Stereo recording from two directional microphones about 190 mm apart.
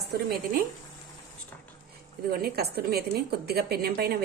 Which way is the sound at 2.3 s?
55° right (ahead or behind).